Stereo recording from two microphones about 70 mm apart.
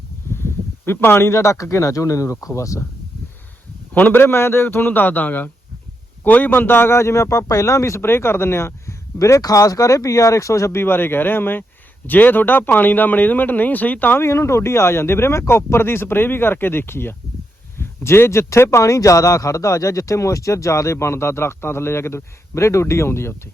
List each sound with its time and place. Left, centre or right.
0.9 s a man's voice: left
3.9 s a man's voice: left
14.3 s a man's voice: left